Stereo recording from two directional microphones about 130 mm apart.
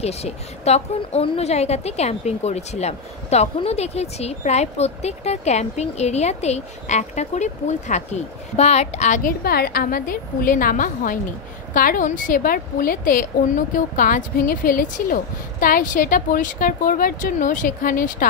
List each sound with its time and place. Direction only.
0.0 s a woman's voice: 55° left (ahead or behind)
9.8 s speech: 90° left